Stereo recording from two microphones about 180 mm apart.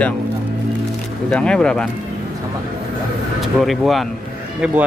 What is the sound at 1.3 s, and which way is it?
Speech, 5° left (ahead or behind).